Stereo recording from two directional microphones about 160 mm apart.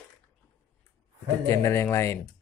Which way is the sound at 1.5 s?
15° left (ahead or behind).